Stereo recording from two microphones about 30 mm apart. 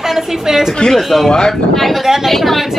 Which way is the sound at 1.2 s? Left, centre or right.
Centre.